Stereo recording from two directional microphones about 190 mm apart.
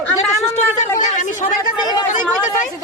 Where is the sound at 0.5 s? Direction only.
40° left (ahead or behind).